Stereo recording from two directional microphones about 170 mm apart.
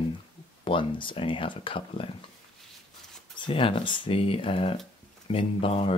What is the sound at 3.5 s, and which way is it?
Speech, 30° left (ahead or behind).